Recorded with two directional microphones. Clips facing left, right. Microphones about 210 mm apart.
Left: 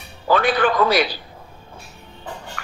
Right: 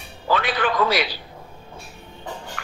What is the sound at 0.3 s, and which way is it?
Speech, 45° left (ahead or behind).